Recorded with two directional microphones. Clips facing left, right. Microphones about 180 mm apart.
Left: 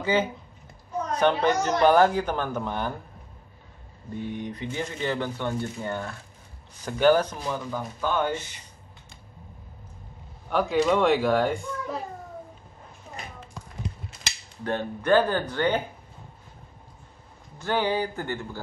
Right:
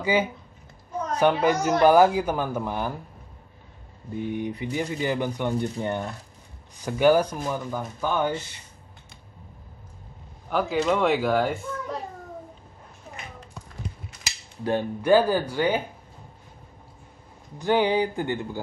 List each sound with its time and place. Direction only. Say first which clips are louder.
0.0 s speech: right 1 dB; 10° right (ahead or behind)
4.3 s speech: right 5 dB; 10° right (ahead or behind)
10.5 s speech: left 1 dB; centre (ahead or behind)
14.6 s speech: right 3 dB; 10° right (ahead or behind)
17.6 s speech: right 4 dB; 15° right (ahead or behind)